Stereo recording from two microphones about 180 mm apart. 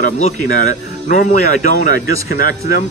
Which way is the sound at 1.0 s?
50° left (ahead or behind).